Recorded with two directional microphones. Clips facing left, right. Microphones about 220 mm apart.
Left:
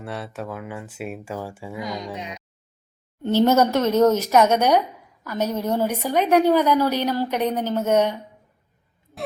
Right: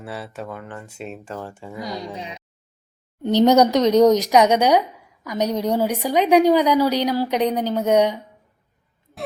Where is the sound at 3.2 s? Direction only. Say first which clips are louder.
Right 3 dB; 15° right (ahead or behind).